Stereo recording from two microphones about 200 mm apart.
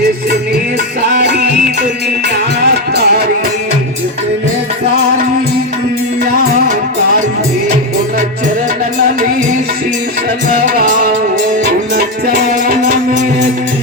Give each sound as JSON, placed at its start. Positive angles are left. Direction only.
{"t": 1.1, "sound": "music", "side_deg": -55}
{"t": 10.5, "sound": "music", "side_deg": -50}